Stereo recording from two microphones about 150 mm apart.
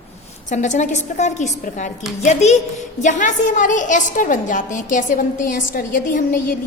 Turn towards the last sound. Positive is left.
turn(degrees=65)  # may be behind; listen again after turning